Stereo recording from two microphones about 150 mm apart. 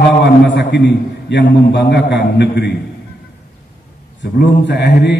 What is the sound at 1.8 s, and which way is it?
Speech, 90° left.